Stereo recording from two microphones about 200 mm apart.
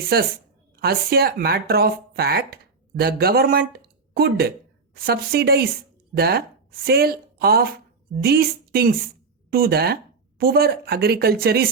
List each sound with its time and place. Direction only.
0.1 s speech: 50° right (ahead or behind)